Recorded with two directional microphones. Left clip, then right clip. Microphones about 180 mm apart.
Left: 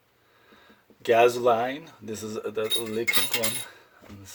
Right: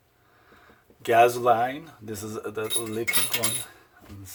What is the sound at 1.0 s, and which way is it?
Speech, 10° right (ahead or behind).